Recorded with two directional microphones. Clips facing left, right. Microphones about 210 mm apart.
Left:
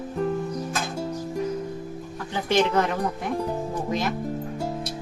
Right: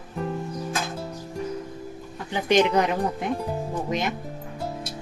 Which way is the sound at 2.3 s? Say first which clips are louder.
Right 2 dB; 15° right (ahead or behind).